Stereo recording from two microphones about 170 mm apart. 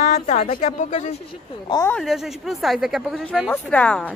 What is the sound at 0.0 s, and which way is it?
A woman's voice, 40° left (ahead or behind).